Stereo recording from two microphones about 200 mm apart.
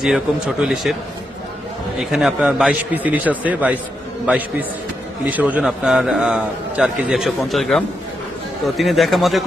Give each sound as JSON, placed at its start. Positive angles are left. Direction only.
{"t": 0.0, "sound": "a man's voice", "side_deg": 0}
{"t": 2.0, "sound": "a man's voice", "side_deg": 0}